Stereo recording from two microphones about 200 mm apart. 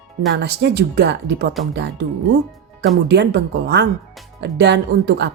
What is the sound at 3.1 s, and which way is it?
A woman's voice, 55° right (ahead or behind).